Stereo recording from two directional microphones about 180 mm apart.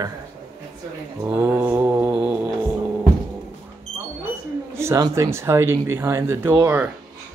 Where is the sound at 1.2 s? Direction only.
10° right (ahead or behind).